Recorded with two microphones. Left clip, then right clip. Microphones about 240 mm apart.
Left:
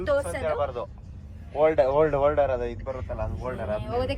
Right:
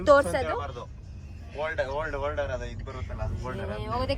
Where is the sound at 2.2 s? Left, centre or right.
Left.